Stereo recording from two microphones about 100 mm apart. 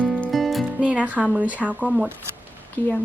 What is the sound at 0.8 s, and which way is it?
Speech, 15° right (ahead or behind).